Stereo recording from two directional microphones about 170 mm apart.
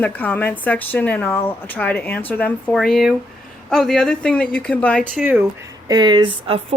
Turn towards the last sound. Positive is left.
turn(degrees=-30)  # may be behind; listen again after turning